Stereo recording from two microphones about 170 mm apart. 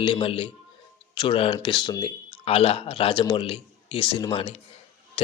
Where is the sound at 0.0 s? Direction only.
30° left (ahead or behind).